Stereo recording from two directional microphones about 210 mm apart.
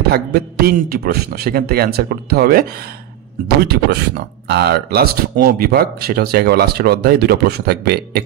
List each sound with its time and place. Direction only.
0.1 s speech: 45° right (ahead or behind)